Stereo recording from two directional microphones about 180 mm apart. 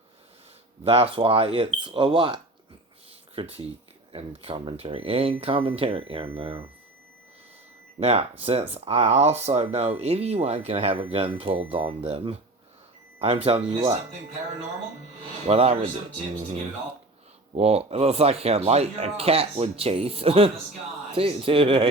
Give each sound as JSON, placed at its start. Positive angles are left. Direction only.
{"t": 0.9, "sound": "speech", "side_deg": -30}
{"t": 7.9, "sound": "speech", "side_deg": -35}
{"t": 13.7, "sound": "speech", "side_deg": -15}
{"t": 15.4, "sound": "speech", "side_deg": -35}